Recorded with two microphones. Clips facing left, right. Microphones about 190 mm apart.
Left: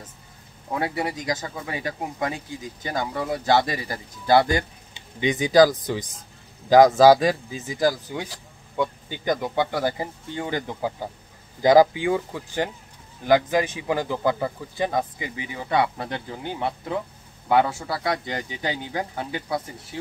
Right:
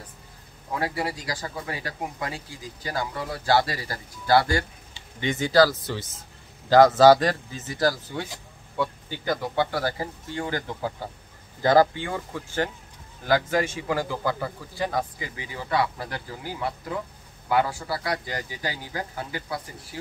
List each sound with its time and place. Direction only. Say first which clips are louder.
0.7 s speech: left 2 dB; 25° left (ahead or behind)